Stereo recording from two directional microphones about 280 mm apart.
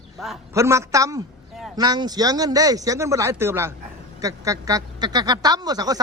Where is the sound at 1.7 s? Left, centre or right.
Centre.